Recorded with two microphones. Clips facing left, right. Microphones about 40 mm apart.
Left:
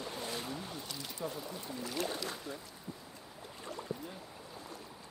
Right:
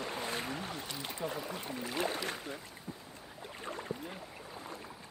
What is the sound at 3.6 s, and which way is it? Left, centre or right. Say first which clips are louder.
Boat: right 1 dB; right.